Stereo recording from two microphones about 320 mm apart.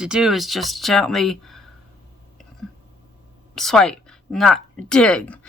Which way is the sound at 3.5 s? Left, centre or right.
Centre.